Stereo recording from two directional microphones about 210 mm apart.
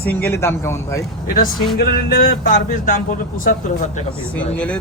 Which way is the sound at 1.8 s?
40° left (ahead or behind).